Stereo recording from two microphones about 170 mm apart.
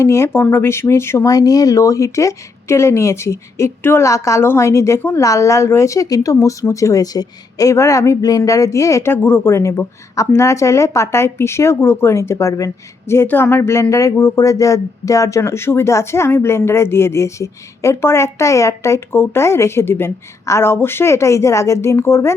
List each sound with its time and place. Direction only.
0.0 s speech: 15° left (ahead or behind)